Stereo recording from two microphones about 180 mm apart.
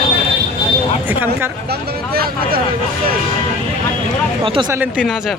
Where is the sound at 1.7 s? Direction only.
60° right (ahead or behind).